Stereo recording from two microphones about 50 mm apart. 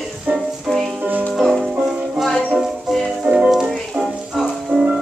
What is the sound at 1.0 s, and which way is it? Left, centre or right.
Music, right.